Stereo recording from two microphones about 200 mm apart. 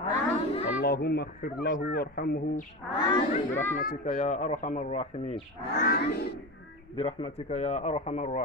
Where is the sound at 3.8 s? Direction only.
45° left (ahead or behind).